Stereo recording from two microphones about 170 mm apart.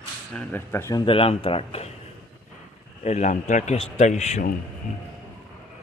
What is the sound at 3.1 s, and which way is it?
Speech, 45° left (ahead or behind).